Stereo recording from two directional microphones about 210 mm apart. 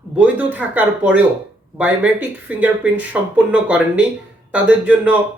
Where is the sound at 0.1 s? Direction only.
5° right (ahead or behind).